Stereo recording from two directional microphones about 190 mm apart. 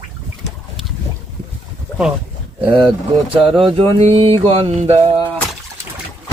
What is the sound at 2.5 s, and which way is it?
Speech, 30° right (ahead or behind).